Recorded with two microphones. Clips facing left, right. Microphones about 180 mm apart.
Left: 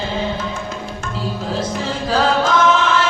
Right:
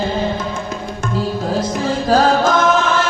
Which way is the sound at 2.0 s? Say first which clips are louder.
Right 3 dB; 45° right (ahead or behind).